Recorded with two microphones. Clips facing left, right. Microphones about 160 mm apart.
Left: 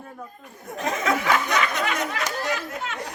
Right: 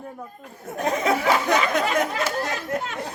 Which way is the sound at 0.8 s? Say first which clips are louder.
Right 2 dB; 35° right (ahead or behind).